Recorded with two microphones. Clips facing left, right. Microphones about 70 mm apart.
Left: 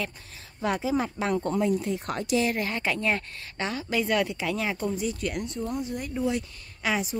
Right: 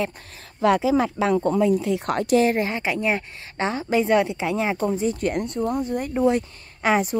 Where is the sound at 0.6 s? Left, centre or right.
Right.